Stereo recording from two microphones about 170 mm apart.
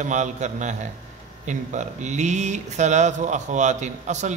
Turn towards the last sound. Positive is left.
turn(degrees=-45)  # may be behind; listen again after turning